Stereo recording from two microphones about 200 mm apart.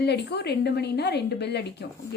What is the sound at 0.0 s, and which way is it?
A woman's voice, 55° left (ahead or behind).